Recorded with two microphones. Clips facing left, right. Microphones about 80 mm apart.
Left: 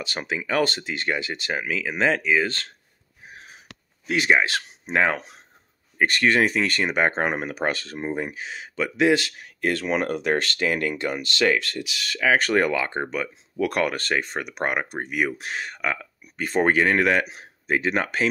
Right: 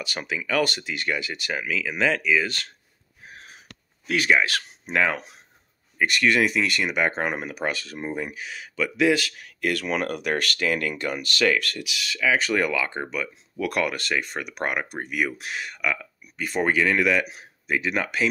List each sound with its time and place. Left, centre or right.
0.0 s speech: left
4.1 s speech: left